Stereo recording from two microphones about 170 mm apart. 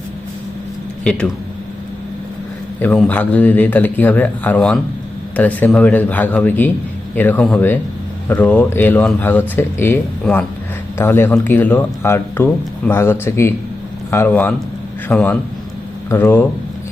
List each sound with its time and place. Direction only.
1.0 s a man's voice: 5° left (ahead or behind)
2.8 s speech: 10° left (ahead or behind)
10.3 s a man's voice: centre (ahead or behind)
10.9 s a man's voice: 15° left (ahead or behind)